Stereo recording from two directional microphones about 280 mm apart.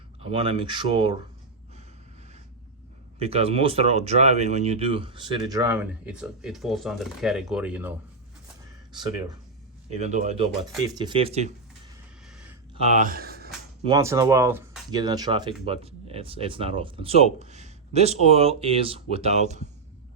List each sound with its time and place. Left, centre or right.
0.2 s speech: centre
3.2 s speech: right
12.2 s a sound: centre
12.7 s speech: right
13.8 s speech: centre